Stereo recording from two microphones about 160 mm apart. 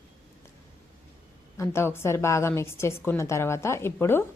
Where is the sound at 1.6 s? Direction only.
15° left (ahead or behind).